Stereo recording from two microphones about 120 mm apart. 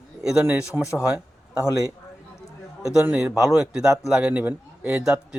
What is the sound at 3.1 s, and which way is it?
A man's voice, 5° right (ahead or behind).